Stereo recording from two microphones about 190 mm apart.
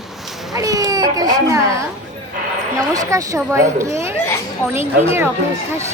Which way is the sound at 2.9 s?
20° right (ahead or behind).